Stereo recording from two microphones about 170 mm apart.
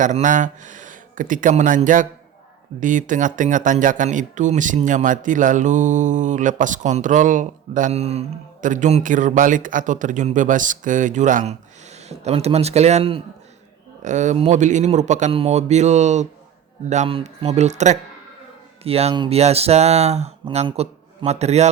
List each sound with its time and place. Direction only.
0.0 s speech: 50° right (ahead or behind)
14.0 s speech: 45° right (ahead or behind)